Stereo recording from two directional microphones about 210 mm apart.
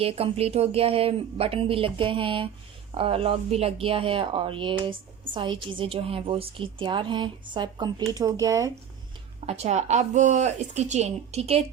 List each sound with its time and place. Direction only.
0.0 s speech: 30° right (ahead or behind)
9.5 s speech: 30° right (ahead or behind)